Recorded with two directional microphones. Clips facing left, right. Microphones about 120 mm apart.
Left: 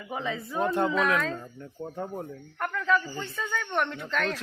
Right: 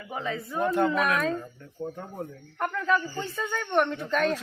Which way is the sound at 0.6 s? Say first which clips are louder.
Right 1 dB; 25° left (ahead or behind).